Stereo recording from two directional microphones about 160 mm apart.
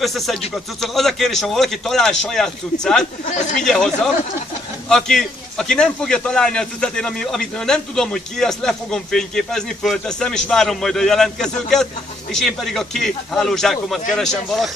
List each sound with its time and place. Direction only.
0.0 s a man's voice: centre (ahead or behind)
3.3 s speech: 50° left (ahead or behind)
3.6 s a man's voice: 5° left (ahead or behind)